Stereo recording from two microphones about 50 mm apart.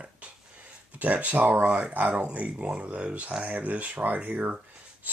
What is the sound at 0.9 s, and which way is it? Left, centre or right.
Speech, right.